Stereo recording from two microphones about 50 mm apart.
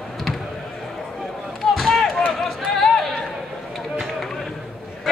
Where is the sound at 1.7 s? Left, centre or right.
Centre.